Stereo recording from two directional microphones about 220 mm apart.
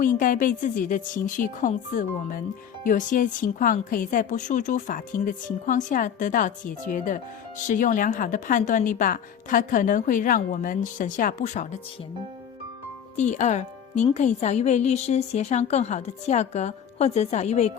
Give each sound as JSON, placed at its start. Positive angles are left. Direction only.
{"t": 0.0, "sound": "a woman's voice", "side_deg": 40}
{"t": 13.1, "sound": "a woman's voice", "side_deg": 30}